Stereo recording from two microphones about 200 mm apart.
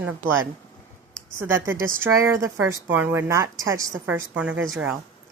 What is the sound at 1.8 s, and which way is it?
Speech, 15° right (ahead or behind).